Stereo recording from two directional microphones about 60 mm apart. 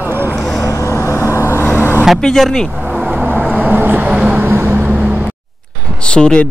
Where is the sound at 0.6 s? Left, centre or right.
Left.